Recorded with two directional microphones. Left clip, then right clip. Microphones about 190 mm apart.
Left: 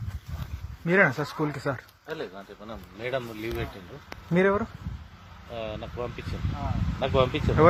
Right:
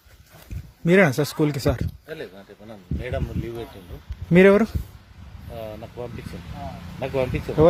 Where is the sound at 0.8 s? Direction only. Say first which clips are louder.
Right 4 dB; 75° right (ahead or behind).